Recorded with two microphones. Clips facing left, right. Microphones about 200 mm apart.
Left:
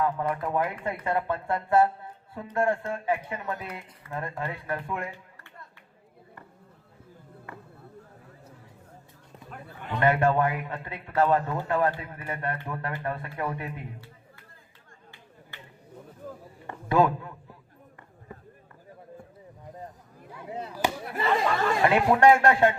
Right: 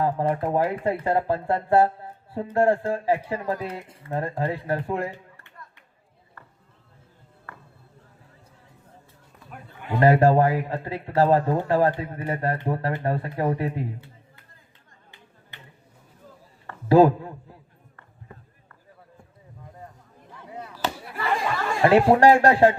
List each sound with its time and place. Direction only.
0.0 s speech: 35° right (ahead or behind)
7.5 s a sound: 15° left (ahead or behind)
10.0 s speech: 35° right (ahead or behind)
16.9 s speech: 35° right (ahead or behind)
20.5 s chop: 25° left (ahead or behind)
21.2 s a sound: 20° left (ahead or behind)
21.8 s speech: 35° right (ahead or behind)